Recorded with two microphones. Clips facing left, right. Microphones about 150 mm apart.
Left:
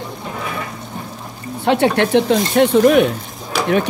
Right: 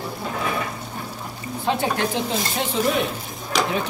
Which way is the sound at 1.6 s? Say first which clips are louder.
Left 8 dB; 70° left (ahead or behind).